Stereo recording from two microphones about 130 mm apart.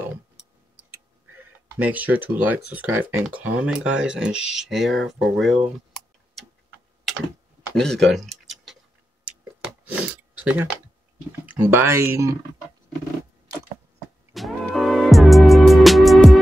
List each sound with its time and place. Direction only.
1.8 s speech: 10° right (ahead or behind)
7.7 s tick-tock: 5° left (ahead or behind)
9.8 s speech: 10° right (ahead or behind)
14.3 s music: centre (ahead or behind)